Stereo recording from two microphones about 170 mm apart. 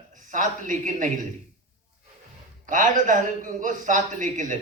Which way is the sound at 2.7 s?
50° right (ahead or behind).